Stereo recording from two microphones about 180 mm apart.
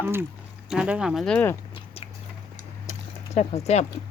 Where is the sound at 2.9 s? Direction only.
35° left (ahead or behind).